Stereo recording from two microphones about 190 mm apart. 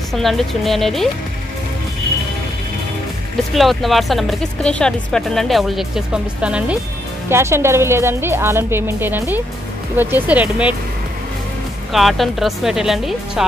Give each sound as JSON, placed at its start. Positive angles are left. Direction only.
{"t": 0.1, "sound": "speech", "side_deg": 0}
{"t": 3.5, "sound": "a woman's voice", "side_deg": 0}
{"t": 11.9, "sound": "speech", "side_deg": 0}